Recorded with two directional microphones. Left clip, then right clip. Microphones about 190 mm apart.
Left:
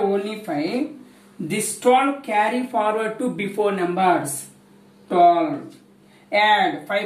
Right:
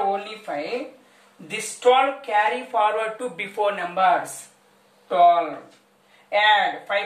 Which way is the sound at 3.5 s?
25° right (ahead or behind).